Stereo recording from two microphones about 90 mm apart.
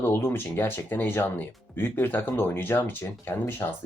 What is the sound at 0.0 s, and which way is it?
Speech, 25° left (ahead or behind).